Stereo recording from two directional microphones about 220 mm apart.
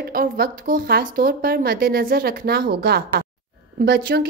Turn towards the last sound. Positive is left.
turn(degrees=-45)  # may be behind; listen again after turning